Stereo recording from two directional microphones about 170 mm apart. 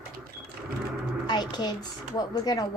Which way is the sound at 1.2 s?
25° left (ahead or behind).